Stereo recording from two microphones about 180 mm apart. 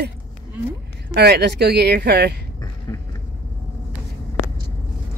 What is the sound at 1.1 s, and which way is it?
Speech, 65° right (ahead or behind).